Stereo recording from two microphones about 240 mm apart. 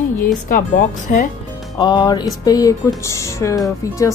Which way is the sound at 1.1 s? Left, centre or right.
Left.